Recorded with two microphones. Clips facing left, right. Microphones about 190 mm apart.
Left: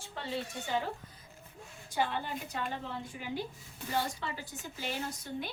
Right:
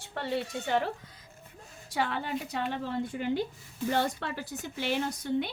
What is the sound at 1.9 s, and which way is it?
Speech, 80° right.